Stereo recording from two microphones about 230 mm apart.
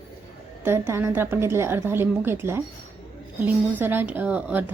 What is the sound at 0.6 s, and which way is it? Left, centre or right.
A woman's voice, centre.